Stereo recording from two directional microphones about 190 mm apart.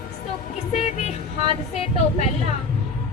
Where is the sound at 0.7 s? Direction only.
35° left (ahead or behind).